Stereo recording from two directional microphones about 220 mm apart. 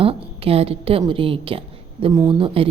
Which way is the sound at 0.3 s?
25° right (ahead or behind).